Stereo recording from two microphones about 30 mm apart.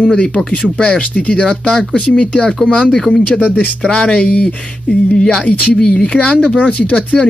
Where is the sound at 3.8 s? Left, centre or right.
Left.